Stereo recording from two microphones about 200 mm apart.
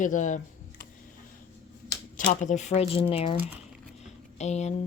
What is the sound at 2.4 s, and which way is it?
Speech, 35° left (ahead or behind).